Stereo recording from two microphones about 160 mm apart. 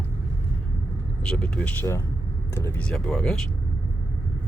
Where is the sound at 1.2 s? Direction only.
5° left (ahead or behind).